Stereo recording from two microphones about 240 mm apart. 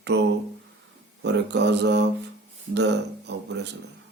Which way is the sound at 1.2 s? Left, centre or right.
Right.